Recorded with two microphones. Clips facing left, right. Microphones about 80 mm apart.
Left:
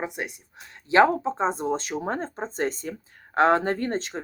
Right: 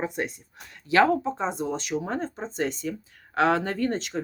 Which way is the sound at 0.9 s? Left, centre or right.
Left.